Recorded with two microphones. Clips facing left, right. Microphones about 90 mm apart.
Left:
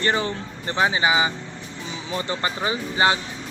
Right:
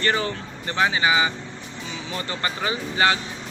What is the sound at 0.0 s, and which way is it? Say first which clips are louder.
Speech: left 1 dB; 20° left (ahead or behind).